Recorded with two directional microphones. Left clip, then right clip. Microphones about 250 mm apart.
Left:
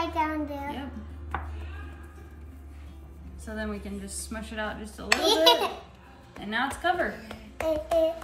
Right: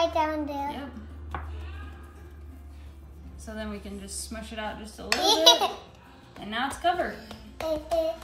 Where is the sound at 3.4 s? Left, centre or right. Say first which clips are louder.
Left 2 dB; centre.